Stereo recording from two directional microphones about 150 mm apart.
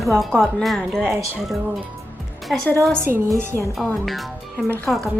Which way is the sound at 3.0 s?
15° right (ahead or behind).